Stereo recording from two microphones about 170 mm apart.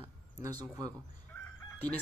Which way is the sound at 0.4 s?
25° right (ahead or behind).